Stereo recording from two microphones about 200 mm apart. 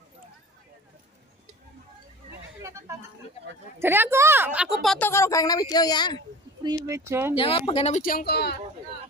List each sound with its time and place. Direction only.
3.8 s a woman's voice: 10° right (ahead or behind)
4.9 s a woman's voice: 10° left (ahead or behind)
6.6 s a woman's voice: 15° right (ahead or behind)
7.3 s speech: 25° left (ahead or behind); by 8.5 s 55° left (ahead or behind)